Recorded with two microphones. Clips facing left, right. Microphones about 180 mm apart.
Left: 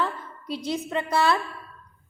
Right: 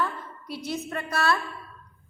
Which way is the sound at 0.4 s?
90° left.